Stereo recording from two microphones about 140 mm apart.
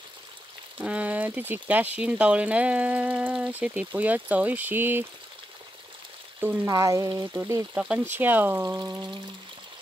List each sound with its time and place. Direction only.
0.7 s speech: 10° right (ahead or behind)
6.4 s speech: 15° right (ahead or behind)
7.7 s speech: 5° right (ahead or behind)